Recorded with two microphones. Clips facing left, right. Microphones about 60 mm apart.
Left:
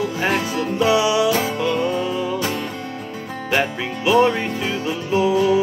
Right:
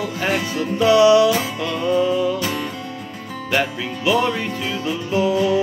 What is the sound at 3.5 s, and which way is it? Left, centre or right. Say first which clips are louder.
Music: even; centre.